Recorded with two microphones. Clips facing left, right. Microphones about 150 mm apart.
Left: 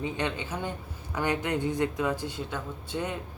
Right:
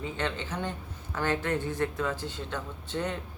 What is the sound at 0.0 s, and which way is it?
A man's voice, 15° left (ahead or behind).